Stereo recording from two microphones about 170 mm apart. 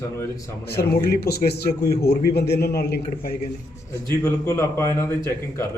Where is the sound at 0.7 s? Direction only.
70° left (ahead or behind).